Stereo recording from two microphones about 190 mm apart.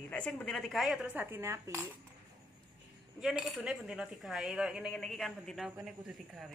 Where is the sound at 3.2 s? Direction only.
Centre (ahead or behind).